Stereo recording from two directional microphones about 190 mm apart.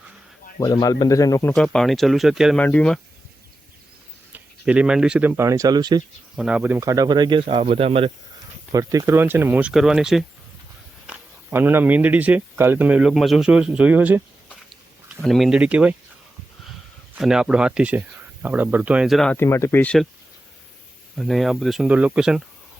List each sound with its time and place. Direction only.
0.6 s speech: 20° left (ahead or behind)
4.3 s speech: 5° right (ahead or behind)
6.3 s speech: 5° right (ahead or behind); by 8.1 s 30° right (ahead or behind)
8.7 s speech: 15° right (ahead or behind)
17.2 s speech: 5° right (ahead or behind)
19.4 s speech: 15° left (ahead or behind)
21.2 s speech: centre (ahead or behind)